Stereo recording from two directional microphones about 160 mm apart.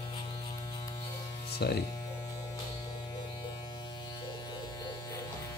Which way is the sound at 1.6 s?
90° left.